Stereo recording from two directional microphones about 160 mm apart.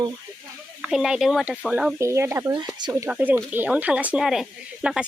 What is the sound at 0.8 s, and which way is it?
Speech, 5° right (ahead or behind).